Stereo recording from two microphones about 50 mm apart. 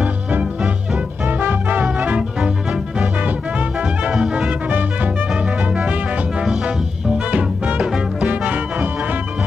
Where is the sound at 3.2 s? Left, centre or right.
Right.